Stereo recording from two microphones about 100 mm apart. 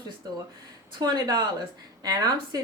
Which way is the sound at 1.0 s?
45° right (ahead or behind).